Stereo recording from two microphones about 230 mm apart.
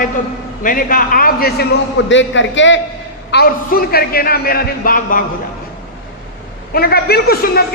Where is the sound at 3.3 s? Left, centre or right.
Left.